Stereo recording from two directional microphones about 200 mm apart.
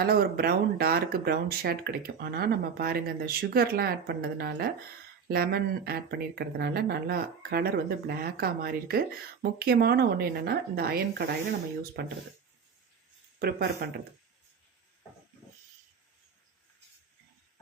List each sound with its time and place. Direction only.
0.0 s speech: 50° right (ahead or behind)
13.4 s speech: 50° right (ahead or behind)